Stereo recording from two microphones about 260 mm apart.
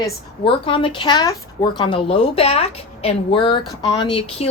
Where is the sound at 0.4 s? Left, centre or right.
Centre.